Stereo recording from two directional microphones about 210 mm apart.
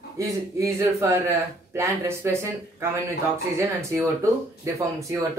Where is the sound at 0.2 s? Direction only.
15° right (ahead or behind).